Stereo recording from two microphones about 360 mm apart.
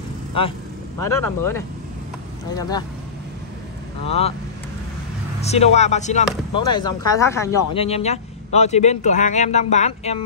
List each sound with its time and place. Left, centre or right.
0.4 s speech: centre
4.0 s speech: centre
5.4 s speech: centre